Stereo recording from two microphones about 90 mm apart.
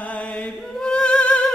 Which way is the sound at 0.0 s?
15° left (ahead or behind).